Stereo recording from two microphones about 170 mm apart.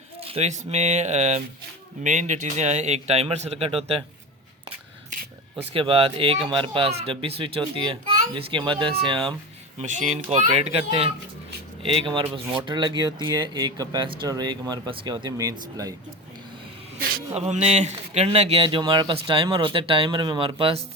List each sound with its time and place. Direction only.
0.2 s speech: 35° right (ahead or behind)
5.7 s speech: 30° right (ahead or behind)
9.8 s speech: 45° right (ahead or behind); by 16.0 s 20° right (ahead or behind)
17.3 s speech: 40° right (ahead or behind)